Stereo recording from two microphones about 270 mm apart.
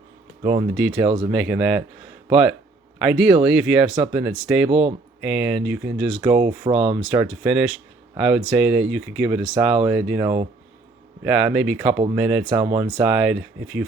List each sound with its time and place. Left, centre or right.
0.8 s speech: centre
6.7 s speech: right
7.1 s speech: centre
12.5 s speech: centre